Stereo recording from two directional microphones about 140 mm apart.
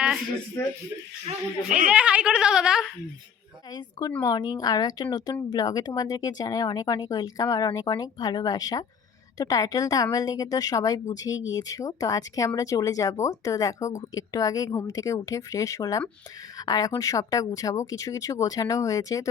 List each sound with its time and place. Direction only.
1.7 s speech: 10° right (ahead or behind)
4.2 s speech: 25° left (ahead or behind)